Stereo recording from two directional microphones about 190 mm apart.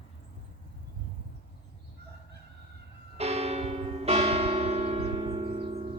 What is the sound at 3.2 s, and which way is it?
Church bell, 35° right (ahead or behind).